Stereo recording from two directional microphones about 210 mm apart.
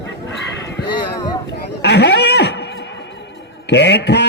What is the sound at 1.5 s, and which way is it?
Horse, 55° left (ahead or behind).